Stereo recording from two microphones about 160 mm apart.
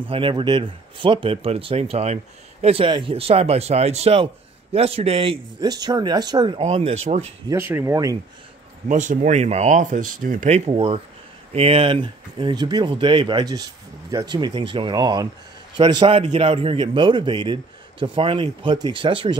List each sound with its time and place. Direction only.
0.1 s a man's voice: 30° right (ahead or behind)
6.6 s a man's voice: 40° right (ahead or behind)
7.4 s speech: 15° right (ahead or behind)
8.8 s speech: 50° right (ahead or behind)
10.7 s a man's voice: 35° right (ahead or behind)